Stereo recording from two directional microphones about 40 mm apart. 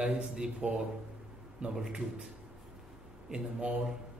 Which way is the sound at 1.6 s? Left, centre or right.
Centre.